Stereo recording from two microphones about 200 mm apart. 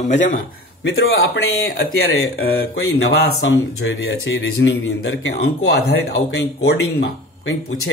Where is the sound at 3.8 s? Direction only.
70° left (ahead or behind); by 6.5 s 55° left (ahead or behind).